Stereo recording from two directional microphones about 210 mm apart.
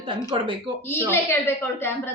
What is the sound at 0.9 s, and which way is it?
A woman's voice, 10° left (ahead or behind).